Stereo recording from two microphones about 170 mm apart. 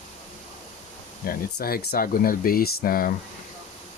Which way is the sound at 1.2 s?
65° left (ahead or behind).